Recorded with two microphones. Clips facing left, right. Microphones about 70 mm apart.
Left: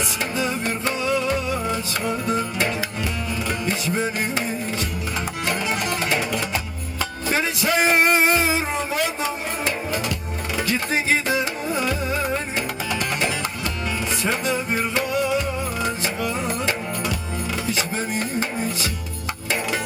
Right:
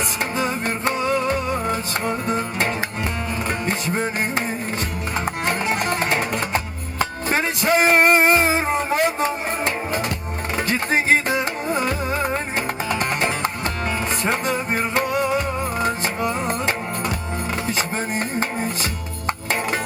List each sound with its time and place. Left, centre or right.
0.3 s music: right